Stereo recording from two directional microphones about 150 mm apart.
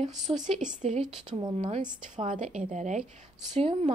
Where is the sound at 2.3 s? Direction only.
55° right (ahead or behind).